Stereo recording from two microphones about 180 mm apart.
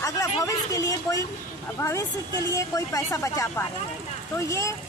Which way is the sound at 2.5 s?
20° left (ahead or behind).